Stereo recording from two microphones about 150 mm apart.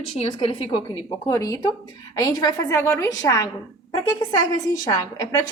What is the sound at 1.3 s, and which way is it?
A woman's voice, 20° left (ahead or behind).